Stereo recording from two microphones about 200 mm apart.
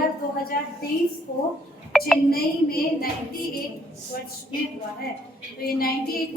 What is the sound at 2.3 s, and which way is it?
Speech, 45° left (ahead or behind).